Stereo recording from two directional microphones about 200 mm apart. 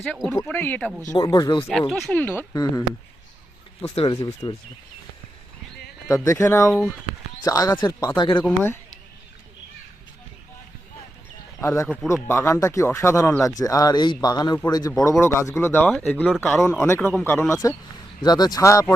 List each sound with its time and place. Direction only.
0.0 s speech: centre (ahead or behind)
1.1 s speech: 20° left (ahead or behind)
1.9 s speech: 5° left (ahead or behind); by 4.5 s 25° left (ahead or behind)
6.1 s speech: 15° left (ahead or behind)
8.4 s speech: 10° left (ahead or behind)
11.6 s speech: 15° left (ahead or behind)
16.8 s speech: 10° left (ahead or behind)